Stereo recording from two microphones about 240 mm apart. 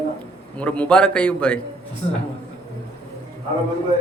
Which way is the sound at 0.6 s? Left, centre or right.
Centre.